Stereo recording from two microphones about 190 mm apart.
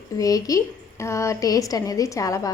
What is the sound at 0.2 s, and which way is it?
A woman's voice, 20° left (ahead or behind).